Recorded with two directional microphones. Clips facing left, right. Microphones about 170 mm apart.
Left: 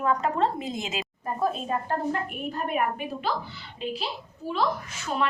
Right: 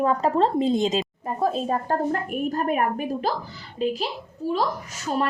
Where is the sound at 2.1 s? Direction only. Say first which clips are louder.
Right 5 dB; 45° right (ahead or behind).